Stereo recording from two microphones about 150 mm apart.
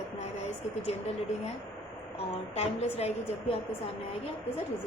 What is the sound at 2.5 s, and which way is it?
A woman's voice, 45° left (ahead or behind).